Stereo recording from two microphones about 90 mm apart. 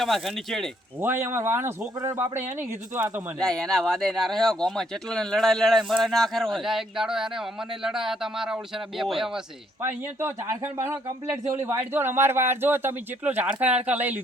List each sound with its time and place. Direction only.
0.0 s speech: centre (ahead or behind)
1.0 s a man's voice: 25° right (ahead or behind)
3.4 s speech: 5° left (ahead or behind)
9.8 s a man's voice: 30° right (ahead or behind)